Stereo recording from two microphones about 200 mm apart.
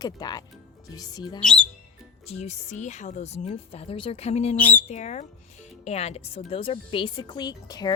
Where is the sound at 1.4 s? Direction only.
5° left (ahead or behind).